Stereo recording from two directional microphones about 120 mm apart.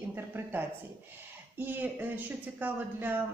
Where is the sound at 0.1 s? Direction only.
15° right (ahead or behind).